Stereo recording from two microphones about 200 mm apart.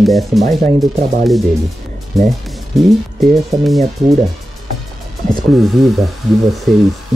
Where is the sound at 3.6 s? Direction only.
Centre (ahead or behind).